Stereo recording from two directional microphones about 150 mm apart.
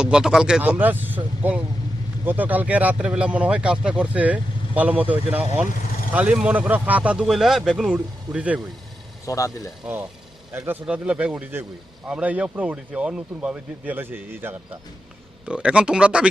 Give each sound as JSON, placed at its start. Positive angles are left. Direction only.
{"t": 0.0, "sound": "speech", "side_deg": -5}
{"t": 9.2, "sound": "speech", "side_deg": 20}
{"t": 9.8, "sound": "speech", "side_deg": -10}